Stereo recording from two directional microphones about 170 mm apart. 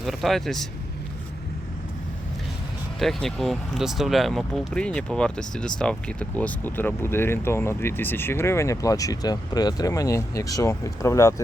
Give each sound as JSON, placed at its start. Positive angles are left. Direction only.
{"t": 0.0, "sound": "speech", "side_deg": 0}
{"t": 3.0, "sound": "speech", "side_deg": 0}